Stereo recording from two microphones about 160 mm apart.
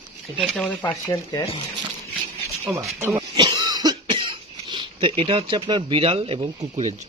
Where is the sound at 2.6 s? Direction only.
20° right (ahead or behind).